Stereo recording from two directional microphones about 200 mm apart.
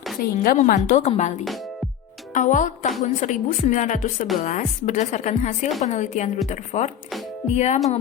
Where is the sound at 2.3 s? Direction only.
40° left (ahead or behind).